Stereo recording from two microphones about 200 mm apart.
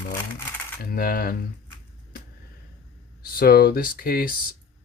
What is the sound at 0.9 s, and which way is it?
Speech, 45° left (ahead or behind).